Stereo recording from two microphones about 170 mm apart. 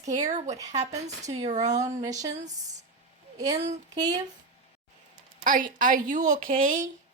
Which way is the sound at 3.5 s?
40° right (ahead or behind).